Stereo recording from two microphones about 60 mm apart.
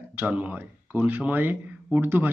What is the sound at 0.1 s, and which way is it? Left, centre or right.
Speech, right.